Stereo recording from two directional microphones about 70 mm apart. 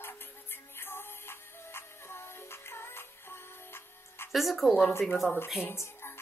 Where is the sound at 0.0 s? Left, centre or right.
Left.